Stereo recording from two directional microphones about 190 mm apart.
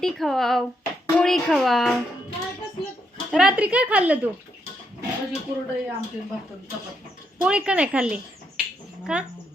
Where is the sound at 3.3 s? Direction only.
5° right (ahead or behind).